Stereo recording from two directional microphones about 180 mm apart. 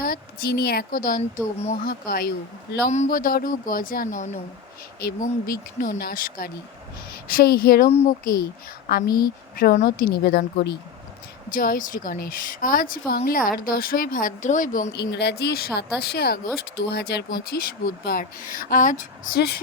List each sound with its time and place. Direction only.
0.0 s a woman's voice: 55° left (ahead or behind)
4.9 s speech: 55° left (ahead or behind)
7.9 s speech: 35° left (ahead or behind)
8.2 s speech: 50° left (ahead or behind)
11.5 s speech: 50° left (ahead or behind)
15.1 s speech: 70° left (ahead or behind)